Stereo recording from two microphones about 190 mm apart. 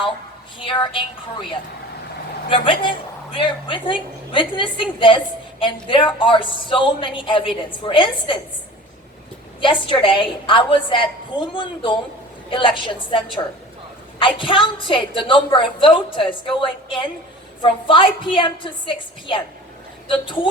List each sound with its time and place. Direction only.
0.6 s a woman's voice: 25° left (ahead or behind)
2.5 s a woman's voice: 25° left (ahead or behind)
9.6 s a woman's voice: 25° left (ahead or behind)